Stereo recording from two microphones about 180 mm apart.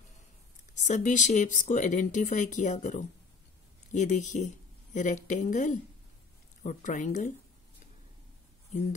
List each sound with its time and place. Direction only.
0.8 s speech: 45° left (ahead or behind)